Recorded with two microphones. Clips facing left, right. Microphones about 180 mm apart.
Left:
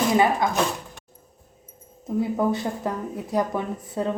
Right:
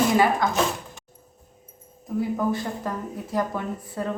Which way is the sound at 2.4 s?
20° left (ahead or behind).